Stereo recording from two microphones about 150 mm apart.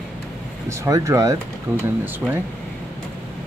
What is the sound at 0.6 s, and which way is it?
Speech, 20° right (ahead or behind).